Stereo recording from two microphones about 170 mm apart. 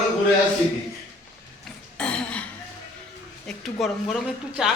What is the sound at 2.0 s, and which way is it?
Throat clearing, 5° left (ahead or behind).